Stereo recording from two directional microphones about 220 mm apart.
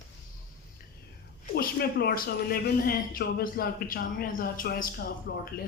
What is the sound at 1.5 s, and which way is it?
Speech, 45° left (ahead or behind).